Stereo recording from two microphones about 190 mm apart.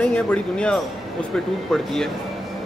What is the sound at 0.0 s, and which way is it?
Speech, 5° left (ahead or behind).